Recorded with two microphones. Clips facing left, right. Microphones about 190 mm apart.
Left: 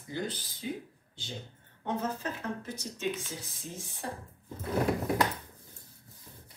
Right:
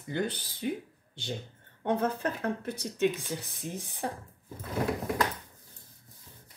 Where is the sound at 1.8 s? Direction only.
60° right (ahead or behind).